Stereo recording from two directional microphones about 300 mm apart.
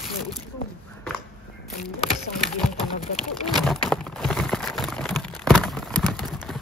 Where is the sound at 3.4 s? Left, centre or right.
Centre.